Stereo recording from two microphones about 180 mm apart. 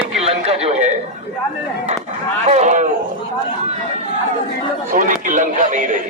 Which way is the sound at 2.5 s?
40° right (ahead or behind).